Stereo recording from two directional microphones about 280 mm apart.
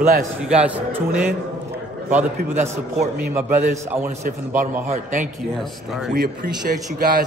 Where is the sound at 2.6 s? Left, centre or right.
Right.